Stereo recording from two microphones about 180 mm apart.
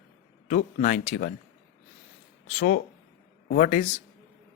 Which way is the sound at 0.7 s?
40° left (ahead or behind).